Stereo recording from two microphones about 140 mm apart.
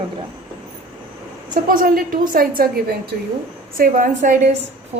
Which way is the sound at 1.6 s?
85° right.